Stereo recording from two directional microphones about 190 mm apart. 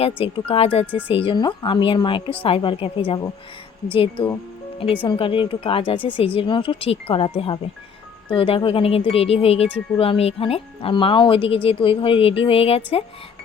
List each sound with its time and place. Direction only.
0.2 s a woman's voice: 30° left (ahead or behind)